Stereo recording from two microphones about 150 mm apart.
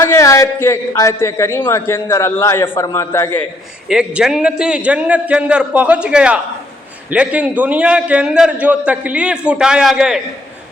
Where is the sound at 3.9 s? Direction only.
5° right (ahead or behind).